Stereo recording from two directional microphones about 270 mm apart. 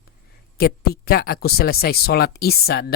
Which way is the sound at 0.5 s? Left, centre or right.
Left.